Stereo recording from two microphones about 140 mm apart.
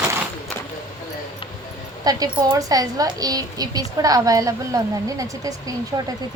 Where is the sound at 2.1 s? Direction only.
25° right (ahead or behind).